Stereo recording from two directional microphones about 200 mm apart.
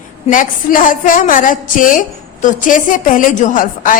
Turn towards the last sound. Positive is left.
turn(degrees=40)  # may be behind; listen again after turning